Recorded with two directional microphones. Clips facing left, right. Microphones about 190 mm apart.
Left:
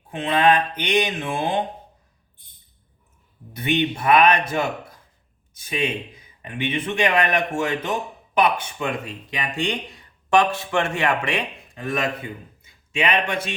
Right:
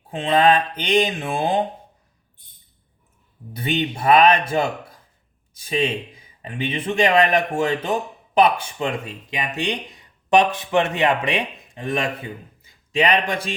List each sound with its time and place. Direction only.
0.1 s speech: 30° right (ahead or behind)
3.5 s speech: 30° right (ahead or behind)
9.3 s speech: 20° right (ahead or behind)
12.6 s a man's voice: 35° right (ahead or behind)